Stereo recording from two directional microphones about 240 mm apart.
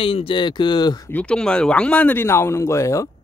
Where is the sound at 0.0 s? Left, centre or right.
Left.